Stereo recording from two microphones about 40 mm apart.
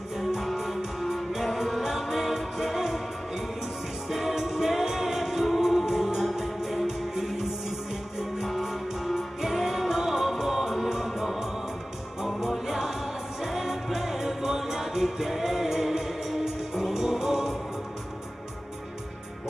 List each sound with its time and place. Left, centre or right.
0.6 s music: centre
8.5 s music: centre